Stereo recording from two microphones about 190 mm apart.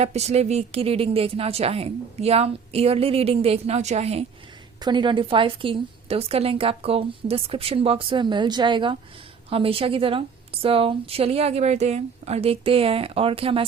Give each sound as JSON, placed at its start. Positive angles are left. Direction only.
{"t": 0.0, "sound": "a woman's voice", "side_deg": -35}